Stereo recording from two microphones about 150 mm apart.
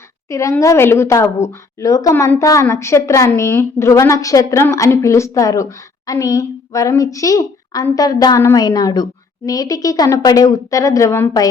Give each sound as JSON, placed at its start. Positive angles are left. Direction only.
{"t": 0.3, "sound": "a woman's voice", "side_deg": 20}